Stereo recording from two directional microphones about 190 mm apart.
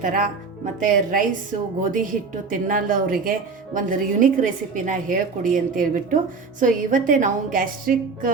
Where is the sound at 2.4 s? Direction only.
45° right (ahead or behind).